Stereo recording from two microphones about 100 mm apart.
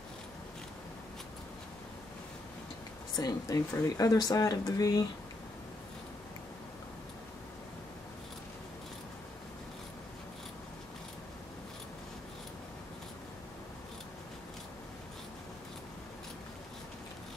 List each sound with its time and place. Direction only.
3.2 s speech: 35° left (ahead or behind)